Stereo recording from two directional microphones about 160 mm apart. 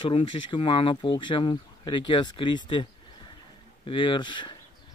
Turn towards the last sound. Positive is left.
turn(degrees=30)  # may be behind; listen again after turning